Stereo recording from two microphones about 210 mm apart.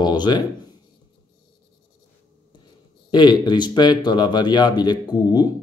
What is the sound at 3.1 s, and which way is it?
Speech, 20° left (ahead or behind).